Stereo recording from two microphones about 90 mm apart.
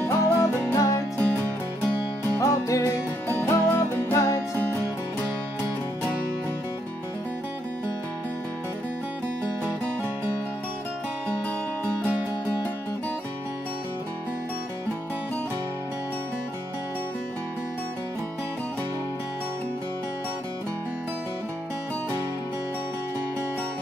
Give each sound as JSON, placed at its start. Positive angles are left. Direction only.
{"t": 0.0, "sound": "music", "side_deg": 25}
{"t": 2.4, "sound": "music", "side_deg": 35}
{"t": 3.3, "sound": "music", "side_deg": 25}